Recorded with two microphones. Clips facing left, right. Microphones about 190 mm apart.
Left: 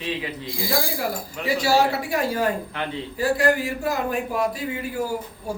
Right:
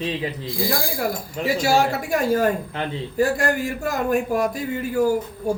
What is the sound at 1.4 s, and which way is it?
A man's voice, 45° right (ahead or behind).